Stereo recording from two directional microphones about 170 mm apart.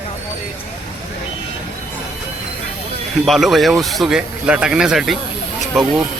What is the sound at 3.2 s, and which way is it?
A man's voice, centre (ahead or behind).